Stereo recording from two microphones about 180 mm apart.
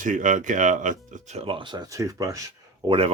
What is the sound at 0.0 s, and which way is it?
Speech, 45° right (ahead or behind).